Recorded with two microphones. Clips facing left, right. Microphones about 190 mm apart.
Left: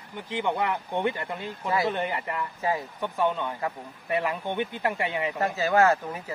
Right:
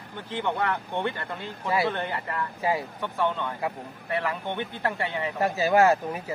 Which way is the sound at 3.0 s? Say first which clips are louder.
Left 2 dB; 10° left (ahead or behind).